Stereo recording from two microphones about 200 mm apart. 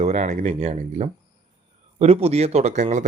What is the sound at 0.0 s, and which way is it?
A man's voice, 35° right (ahead or behind).